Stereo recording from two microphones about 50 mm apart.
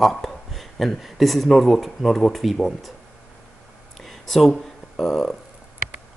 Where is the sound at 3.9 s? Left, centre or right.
Centre.